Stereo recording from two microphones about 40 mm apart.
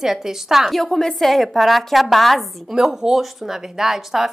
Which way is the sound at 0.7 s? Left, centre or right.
Centre.